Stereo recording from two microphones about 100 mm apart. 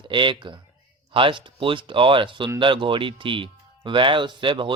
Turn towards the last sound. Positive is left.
turn(degrees=-55)  # may be behind; listen again after turning